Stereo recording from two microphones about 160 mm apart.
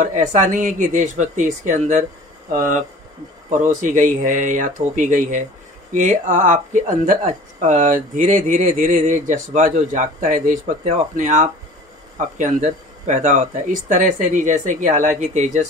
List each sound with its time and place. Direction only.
0.0 s speech: 50° right (ahead or behind)
3.4 s speech: 50° right (ahead or behind)